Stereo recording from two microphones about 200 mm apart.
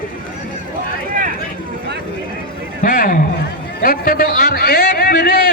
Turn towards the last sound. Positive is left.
turn(degrees=45)  # may be behind; listen again after turning